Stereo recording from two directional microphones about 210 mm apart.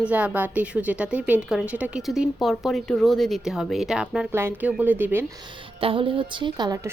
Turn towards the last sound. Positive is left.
turn(degrees=-20)  # may be behind; listen again after turning